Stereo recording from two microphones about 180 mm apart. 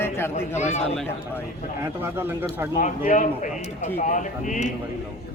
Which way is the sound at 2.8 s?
45° left (ahead or behind).